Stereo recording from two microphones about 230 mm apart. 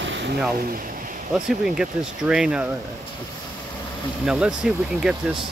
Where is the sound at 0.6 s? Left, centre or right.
Right.